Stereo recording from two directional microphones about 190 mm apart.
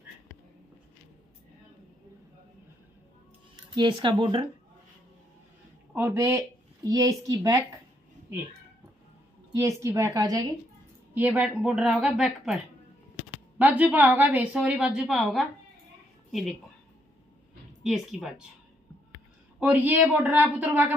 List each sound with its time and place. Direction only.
3.7 s speech: 25° right (ahead or behind)
5.9 s speech: 15° right (ahead or behind)
9.6 s a woman's voice: 15° right (ahead or behind)
11.1 s a woman's voice: 5° right (ahead or behind)
17.8 s a woman's voice: centre (ahead or behind)
19.6 s a woman's voice: 10° right (ahead or behind)